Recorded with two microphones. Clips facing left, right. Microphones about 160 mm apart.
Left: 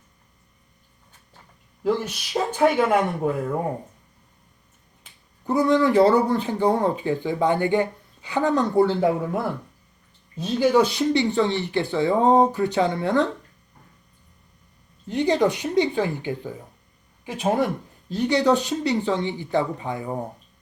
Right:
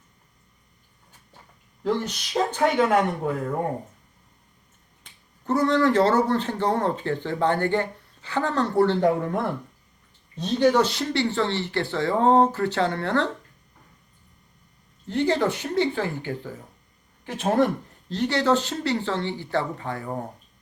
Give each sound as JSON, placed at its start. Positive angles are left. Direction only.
{"t": 1.8, "sound": "speech", "side_deg": 10}
{"t": 5.5, "sound": "speech", "side_deg": 10}
{"t": 15.0, "sound": "speech", "side_deg": 15}